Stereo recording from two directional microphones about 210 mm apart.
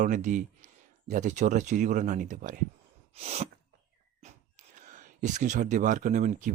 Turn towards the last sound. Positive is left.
turn(degrees=-35)  # may be behind; listen again after turning